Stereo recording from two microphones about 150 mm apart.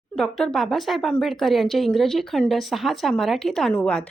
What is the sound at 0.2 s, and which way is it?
A woman's voice, 5° left (ahead or behind).